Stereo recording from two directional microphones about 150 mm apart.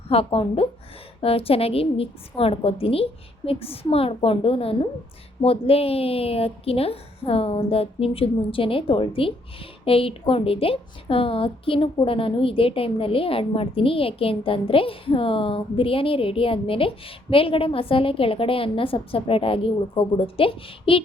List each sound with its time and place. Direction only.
0.1 s a woman's voice: 40° left (ahead or behind)